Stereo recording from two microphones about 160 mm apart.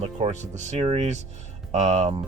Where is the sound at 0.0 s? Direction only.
40° right (ahead or behind).